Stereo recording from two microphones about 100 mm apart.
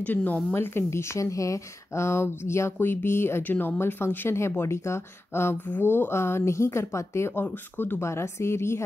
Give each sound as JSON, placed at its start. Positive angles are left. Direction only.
{"t": 0.0, "sound": "speech", "side_deg": 15}